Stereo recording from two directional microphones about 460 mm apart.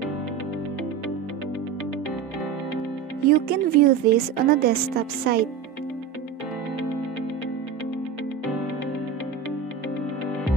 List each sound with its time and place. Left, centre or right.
3.3 s a woman's voice: centre